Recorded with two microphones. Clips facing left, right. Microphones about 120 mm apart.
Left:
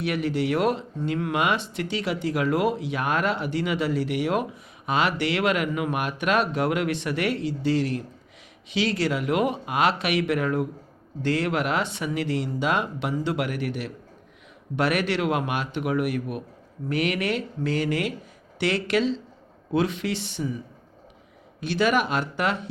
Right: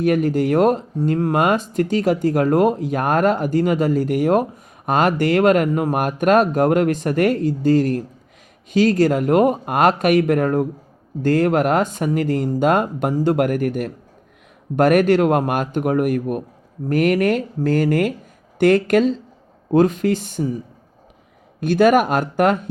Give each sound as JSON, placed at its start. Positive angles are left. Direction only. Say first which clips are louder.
{"t": 0.0, "sound": "speech", "louder": "right 8 dB", "side_deg": -45}
{"t": 21.6, "sound": "speech", "louder": "right 8 dB", "side_deg": -50}